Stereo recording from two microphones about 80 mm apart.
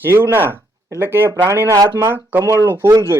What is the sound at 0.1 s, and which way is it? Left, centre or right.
Speech, right.